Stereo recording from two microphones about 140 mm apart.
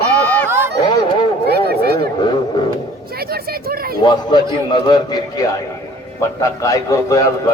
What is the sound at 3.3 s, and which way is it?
Speech, 90° right.